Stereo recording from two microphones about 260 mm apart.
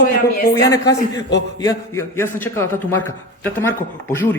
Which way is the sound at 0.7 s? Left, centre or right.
Centre.